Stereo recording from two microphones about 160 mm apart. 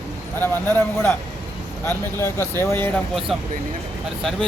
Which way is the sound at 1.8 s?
15° left (ahead or behind).